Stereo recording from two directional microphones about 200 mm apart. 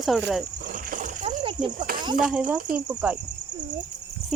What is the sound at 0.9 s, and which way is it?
Splash, 40° right (ahead or behind).